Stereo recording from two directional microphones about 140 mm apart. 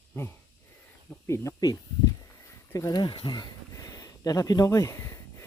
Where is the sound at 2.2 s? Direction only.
25° left (ahead or behind).